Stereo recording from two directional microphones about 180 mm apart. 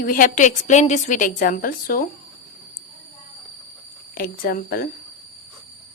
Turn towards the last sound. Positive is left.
turn(degrees=55)  # may be behind; listen again after turning